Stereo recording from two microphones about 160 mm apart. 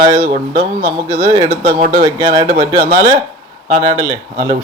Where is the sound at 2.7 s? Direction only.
60° right (ahead or behind).